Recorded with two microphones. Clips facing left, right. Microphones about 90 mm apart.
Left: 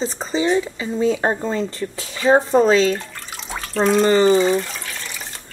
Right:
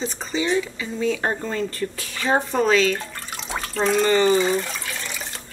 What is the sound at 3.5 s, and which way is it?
Speech, centre (ahead or behind).